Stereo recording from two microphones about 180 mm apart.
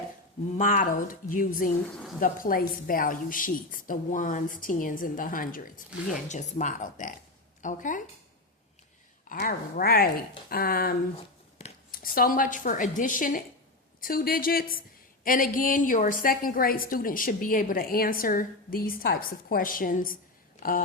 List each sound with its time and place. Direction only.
0.6 s a woman's voice: 50° left (ahead or behind)
9.3 s a woman's voice: 50° left (ahead or behind)